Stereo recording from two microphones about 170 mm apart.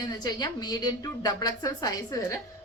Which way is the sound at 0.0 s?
25° left (ahead or behind).